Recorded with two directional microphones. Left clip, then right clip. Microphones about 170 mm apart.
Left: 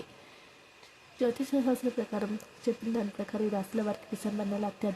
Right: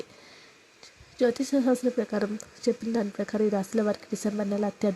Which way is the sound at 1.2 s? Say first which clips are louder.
Right 5 dB; 25° right (ahead or behind).